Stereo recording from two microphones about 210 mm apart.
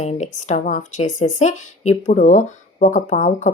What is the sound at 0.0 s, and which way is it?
Speech, 35° left (ahead or behind).